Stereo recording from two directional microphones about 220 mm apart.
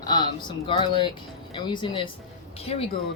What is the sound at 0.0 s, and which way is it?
Speech, 20° left (ahead or behind).